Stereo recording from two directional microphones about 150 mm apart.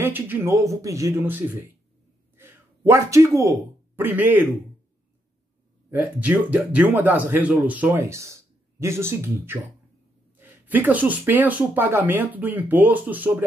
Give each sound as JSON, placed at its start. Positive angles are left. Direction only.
{"t": 0.0, "sound": "speech", "side_deg": -15}
{"t": 5.9, "sound": "speech", "side_deg": -10}